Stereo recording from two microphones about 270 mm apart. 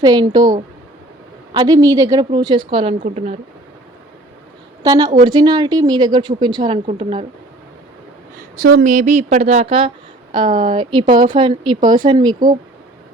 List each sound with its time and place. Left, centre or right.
0.0 s a woman's voice: centre
1.5 s a woman's voice: centre
4.8 s a woman's voice: centre
8.5 s a woman's voice: right